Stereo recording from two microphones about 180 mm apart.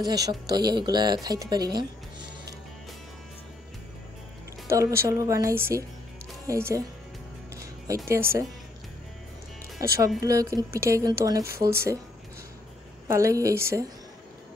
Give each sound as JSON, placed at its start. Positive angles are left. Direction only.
{"t": 0.0, "sound": "speech", "side_deg": -20}
{"t": 4.6, "sound": "speech", "side_deg": -15}
{"t": 8.1, "sound": "speech", "side_deg": -15}
{"t": 9.8, "sound": "speech", "side_deg": -20}
{"t": 13.1, "sound": "speech", "side_deg": -15}